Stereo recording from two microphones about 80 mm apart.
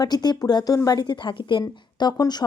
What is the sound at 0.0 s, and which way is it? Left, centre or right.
A woman's voice, left.